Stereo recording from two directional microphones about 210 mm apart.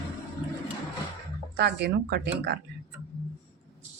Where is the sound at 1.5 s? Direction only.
50° right (ahead or behind).